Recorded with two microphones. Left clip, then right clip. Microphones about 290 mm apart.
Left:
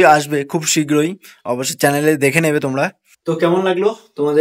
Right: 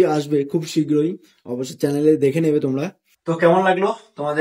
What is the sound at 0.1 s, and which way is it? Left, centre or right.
Speech, centre.